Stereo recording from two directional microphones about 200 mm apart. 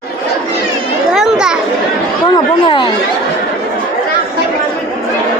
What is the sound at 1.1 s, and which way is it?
Children playing, centre (ahead or behind).